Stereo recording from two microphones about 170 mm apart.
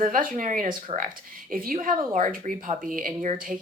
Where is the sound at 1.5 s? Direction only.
55° right (ahead or behind).